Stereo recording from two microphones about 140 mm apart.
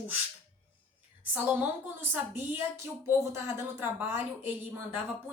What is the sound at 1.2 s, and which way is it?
A woman's voice, 10° right (ahead or behind).